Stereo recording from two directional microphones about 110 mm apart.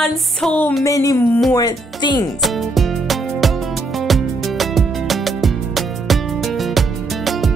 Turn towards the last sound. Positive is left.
turn(degrees=0)  # may be behind; listen again after turning